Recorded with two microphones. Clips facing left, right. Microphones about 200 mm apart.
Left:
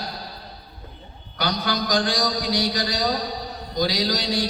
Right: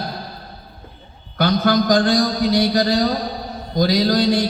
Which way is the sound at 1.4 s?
50° right (ahead or behind).